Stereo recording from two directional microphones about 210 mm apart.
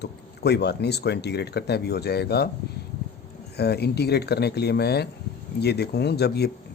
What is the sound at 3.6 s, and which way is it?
Speech, 50° left (ahead or behind).